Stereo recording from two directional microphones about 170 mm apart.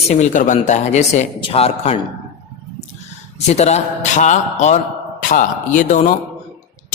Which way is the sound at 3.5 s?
40° left (ahead or behind).